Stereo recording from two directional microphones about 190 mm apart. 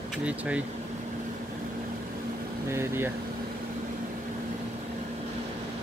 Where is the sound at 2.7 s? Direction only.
15° right (ahead or behind).